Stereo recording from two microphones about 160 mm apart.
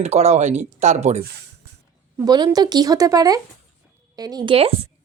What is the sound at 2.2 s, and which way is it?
Speech, 25° right (ahead or behind).